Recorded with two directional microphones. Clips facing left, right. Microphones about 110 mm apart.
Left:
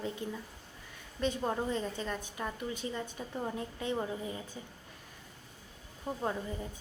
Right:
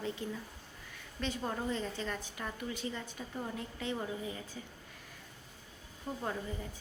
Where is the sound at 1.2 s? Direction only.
20° left (ahead or behind).